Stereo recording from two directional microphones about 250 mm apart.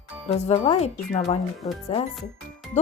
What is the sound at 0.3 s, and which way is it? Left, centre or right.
Speech, left.